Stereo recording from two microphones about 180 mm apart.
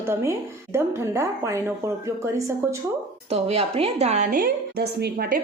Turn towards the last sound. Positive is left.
turn(degrees=-55)  # may be behind; listen again after turning